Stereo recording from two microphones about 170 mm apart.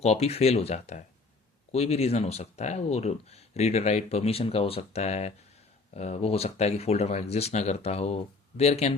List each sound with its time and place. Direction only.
0.0 s speech: 40° left (ahead or behind)